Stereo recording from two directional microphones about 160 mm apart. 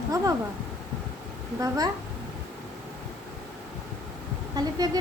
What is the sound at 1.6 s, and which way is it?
Speech, 25° right (ahead or behind).